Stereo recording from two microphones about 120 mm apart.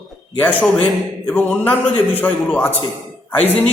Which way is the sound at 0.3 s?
15° left (ahead or behind).